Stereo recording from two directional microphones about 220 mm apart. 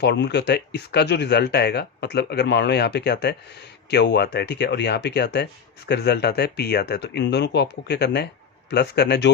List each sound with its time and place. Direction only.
0.0 s speech: 50° left (ahead or behind)